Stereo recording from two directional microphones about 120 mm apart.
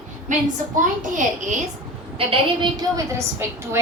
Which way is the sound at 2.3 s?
40° right (ahead or behind).